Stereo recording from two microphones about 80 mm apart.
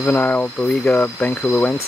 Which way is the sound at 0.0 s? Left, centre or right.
Left.